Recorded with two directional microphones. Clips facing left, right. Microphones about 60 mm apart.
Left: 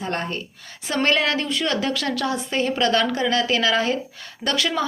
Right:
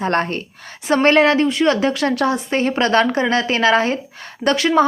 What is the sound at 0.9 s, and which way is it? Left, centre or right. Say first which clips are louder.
A woman's voice: right 8 dB; right.